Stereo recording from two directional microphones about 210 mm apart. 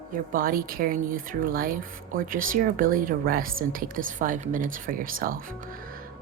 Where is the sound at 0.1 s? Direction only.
40° right (ahead or behind).